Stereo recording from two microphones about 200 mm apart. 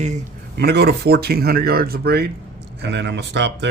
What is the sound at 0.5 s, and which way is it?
Speech, 55° right (ahead or behind).